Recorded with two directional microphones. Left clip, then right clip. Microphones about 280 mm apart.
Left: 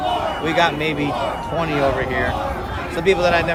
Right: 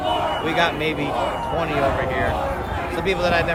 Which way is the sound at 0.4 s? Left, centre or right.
Left.